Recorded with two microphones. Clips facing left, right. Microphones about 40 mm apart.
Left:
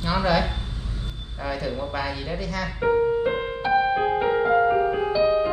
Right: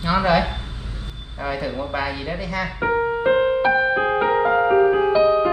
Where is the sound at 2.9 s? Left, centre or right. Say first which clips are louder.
Right 3 dB; right.